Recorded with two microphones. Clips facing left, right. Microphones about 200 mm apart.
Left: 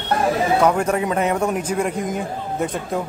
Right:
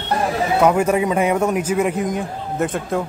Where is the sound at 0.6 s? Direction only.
5° right (ahead or behind).